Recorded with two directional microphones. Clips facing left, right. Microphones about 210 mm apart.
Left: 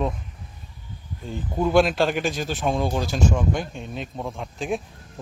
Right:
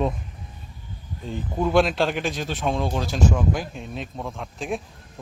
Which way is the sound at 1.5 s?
Centre (ahead or behind).